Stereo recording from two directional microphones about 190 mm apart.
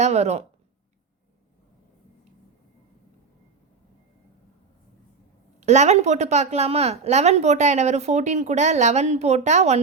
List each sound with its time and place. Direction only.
0.0 s a woman's voice: 35° right (ahead or behind)
5.5 s a woman's voice: 35° right (ahead or behind)